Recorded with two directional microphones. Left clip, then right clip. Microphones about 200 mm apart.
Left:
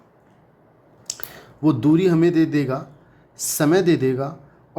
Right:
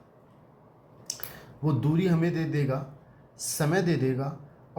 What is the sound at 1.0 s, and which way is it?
A man's voice, 45° left (ahead or behind).